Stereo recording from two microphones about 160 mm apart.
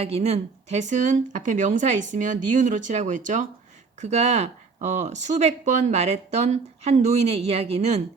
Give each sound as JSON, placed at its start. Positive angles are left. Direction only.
{"t": 0.0, "sound": "speech", "side_deg": -40}